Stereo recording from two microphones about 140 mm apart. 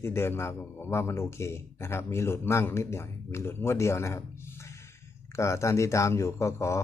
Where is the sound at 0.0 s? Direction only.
15° left (ahead or behind).